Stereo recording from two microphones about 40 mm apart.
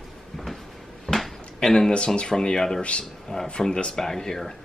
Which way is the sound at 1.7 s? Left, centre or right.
Left.